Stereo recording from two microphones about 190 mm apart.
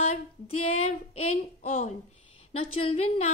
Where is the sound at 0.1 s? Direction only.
35° left (ahead or behind).